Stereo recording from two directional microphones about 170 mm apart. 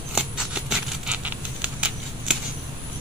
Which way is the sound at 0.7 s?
5° right (ahead or behind).